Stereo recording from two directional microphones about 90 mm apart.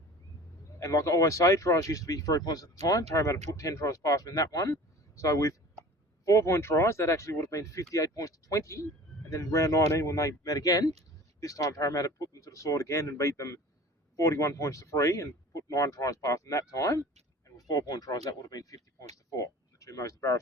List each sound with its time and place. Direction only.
0.8 s speech: 35° left (ahead or behind)
17.7 s speech: 50° left (ahead or behind)